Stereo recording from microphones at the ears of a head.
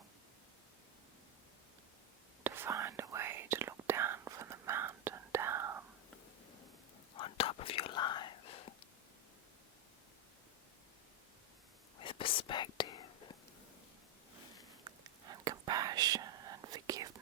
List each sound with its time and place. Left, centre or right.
2.4 s whispering: right
7.1 s whispering: left
11.9 s whispering: left
14.8 s whispering: right